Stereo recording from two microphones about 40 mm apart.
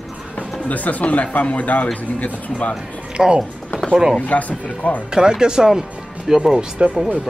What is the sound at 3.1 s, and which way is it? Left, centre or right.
Speech, right.